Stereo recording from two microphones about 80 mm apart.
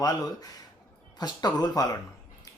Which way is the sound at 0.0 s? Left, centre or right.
Left.